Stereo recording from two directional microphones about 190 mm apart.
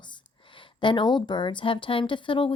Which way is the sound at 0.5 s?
25° left (ahead or behind).